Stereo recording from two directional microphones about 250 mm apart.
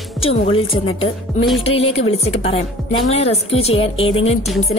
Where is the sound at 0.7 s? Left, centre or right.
Left.